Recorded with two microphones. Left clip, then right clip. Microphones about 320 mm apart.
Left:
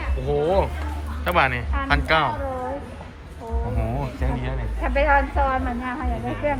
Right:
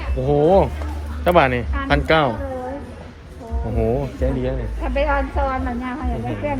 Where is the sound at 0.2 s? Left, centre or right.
Right.